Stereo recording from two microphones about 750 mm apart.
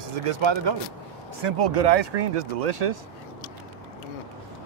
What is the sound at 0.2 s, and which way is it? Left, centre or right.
A man's voice, right.